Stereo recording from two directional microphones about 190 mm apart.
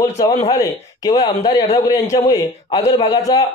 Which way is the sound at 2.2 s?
15° left (ahead or behind).